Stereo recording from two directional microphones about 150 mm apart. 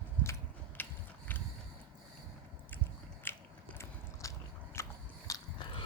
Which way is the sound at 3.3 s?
15° left (ahead or behind).